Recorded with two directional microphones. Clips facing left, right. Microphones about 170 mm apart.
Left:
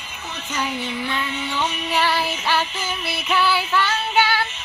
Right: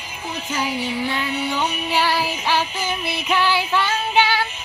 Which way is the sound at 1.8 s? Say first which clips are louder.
Even; 10° right (ahead or behind).